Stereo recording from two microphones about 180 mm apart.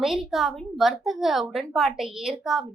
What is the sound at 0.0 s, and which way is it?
A woman's voice, centre (ahead or behind).